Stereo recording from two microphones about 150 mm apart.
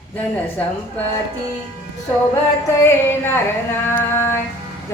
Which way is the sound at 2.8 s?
15° left (ahead or behind).